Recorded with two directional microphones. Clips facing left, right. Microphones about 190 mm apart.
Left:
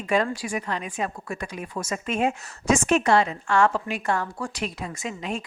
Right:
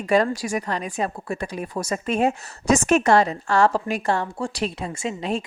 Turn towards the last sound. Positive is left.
turn(degrees=-30)  # may be behind; listen again after turning